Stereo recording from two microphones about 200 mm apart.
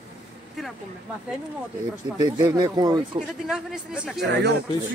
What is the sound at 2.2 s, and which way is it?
Speech, 20° right (ahead or behind).